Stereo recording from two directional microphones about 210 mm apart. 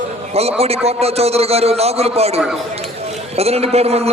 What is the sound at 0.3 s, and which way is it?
A man's voice, 30° right (ahead or behind).